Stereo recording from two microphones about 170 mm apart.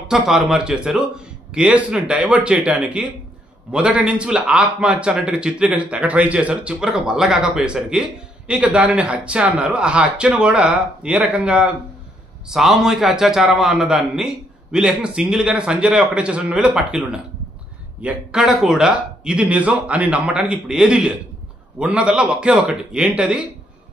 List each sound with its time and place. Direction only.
0.1 s a man's voice: centre (ahead or behind)